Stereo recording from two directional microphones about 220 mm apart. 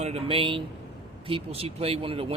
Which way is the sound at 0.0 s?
25° right (ahead or behind).